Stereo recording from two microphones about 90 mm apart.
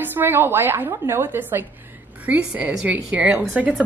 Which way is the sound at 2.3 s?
15° right (ahead or behind).